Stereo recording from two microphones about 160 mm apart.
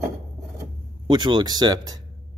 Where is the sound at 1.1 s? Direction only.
30° right (ahead or behind).